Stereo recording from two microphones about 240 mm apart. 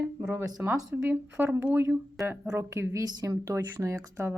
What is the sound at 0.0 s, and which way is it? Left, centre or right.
Speech, centre.